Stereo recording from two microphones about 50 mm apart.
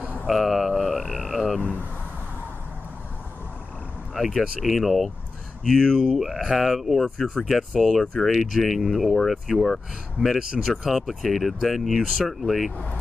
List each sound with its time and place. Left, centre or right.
0.3 s mantra: centre
1.6 s speech: left
4.1 s speech: centre
5.7 s speech: centre
6.1 s speech: centre